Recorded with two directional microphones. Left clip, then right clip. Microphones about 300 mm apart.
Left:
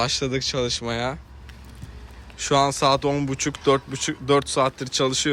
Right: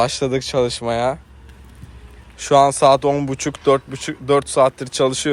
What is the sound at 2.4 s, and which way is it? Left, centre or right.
Speech, centre.